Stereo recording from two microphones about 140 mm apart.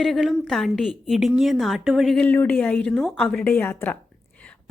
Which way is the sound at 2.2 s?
10° left (ahead or behind).